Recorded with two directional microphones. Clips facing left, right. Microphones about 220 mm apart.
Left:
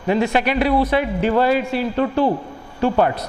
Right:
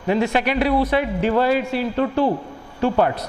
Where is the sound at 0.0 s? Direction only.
10° left (ahead or behind).